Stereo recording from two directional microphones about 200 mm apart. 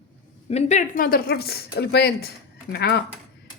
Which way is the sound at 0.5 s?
35° left (ahead or behind).